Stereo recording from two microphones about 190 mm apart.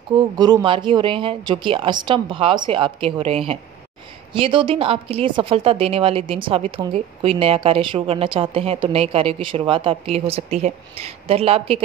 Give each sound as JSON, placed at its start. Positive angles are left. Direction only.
{"t": 0.4, "sound": "a woman's voice", "side_deg": -20}